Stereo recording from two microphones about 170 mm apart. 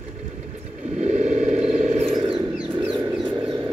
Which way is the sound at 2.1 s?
30° right (ahead or behind).